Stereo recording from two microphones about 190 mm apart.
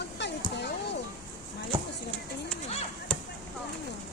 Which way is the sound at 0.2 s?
65° left (ahead or behind).